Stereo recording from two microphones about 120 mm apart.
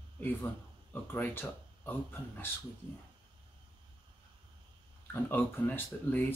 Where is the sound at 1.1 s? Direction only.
15° left (ahead or behind).